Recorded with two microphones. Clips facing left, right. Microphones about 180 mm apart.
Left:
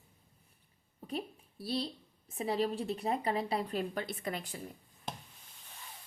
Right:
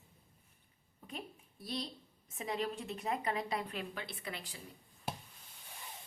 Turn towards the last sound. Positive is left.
turn(degrees=-5)  # may be behind; listen again after turning